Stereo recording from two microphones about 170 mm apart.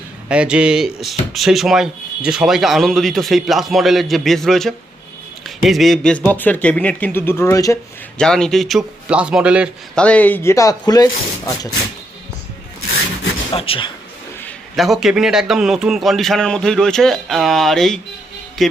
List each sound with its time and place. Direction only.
0.3 s a man's voice: 5° right (ahead or behind); by 7.8 s 20° left (ahead or behind)
8.2 s a man's voice: 5° left (ahead or behind)
9.9 s speech: 5° left (ahead or behind)
13.5 s speech: 30° left (ahead or behind)
14.4 s a man's voice: centre (ahead or behind)